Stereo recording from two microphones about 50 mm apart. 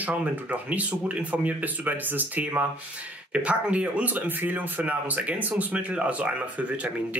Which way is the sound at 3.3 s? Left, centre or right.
Right.